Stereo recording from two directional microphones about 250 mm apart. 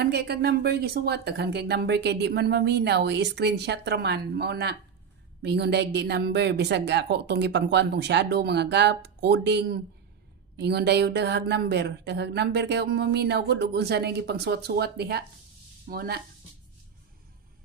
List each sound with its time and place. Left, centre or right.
0.0 s speech: right